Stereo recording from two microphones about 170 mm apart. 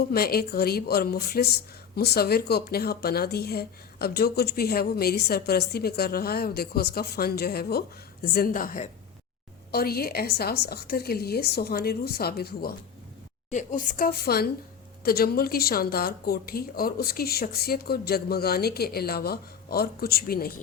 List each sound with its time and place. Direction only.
0.1 s speech: 65° left (ahead or behind)
9.7 s a woman's voice: 65° left (ahead or behind)
13.5 s speech: 45° left (ahead or behind); by 20.5 s 65° left (ahead or behind)